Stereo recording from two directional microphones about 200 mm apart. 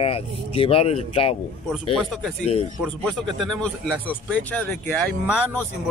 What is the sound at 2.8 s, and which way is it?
Speech, centre (ahead or behind).